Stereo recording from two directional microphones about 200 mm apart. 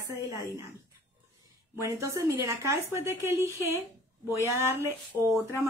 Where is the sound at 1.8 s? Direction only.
15° right (ahead or behind).